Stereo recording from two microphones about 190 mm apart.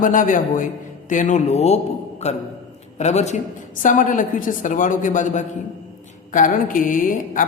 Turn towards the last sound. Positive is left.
turn(degrees=45)  # may be behind; listen again after turning